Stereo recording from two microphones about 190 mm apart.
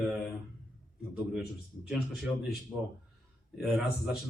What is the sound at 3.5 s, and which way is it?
Speech, centre (ahead or behind).